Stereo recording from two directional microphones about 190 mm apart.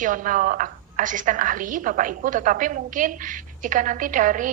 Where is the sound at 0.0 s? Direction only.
45° right (ahead or behind).